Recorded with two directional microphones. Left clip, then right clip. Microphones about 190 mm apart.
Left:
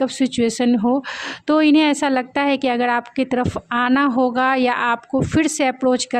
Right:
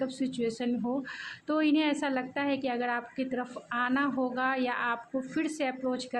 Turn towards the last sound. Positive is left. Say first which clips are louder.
# left 14 dB
turn(degrees=50)  # may be behind; listen again after turning